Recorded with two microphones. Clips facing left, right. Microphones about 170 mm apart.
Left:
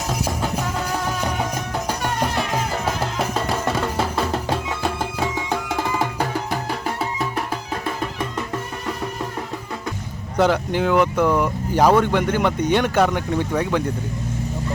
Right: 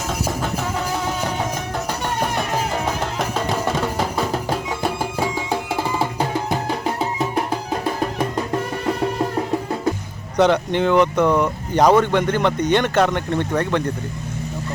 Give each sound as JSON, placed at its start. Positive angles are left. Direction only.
{"t": 3.2, "sound": "music", "side_deg": 0}
{"t": 5.2, "sound": "music", "side_deg": -15}
{"t": 7.0, "sound": "music", "side_deg": -25}
{"t": 10.3, "sound": "speech", "side_deg": 5}